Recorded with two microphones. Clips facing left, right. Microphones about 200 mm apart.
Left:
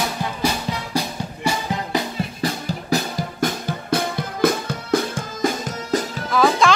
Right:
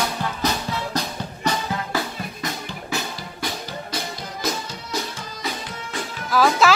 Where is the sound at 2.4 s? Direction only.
35° left (ahead or behind).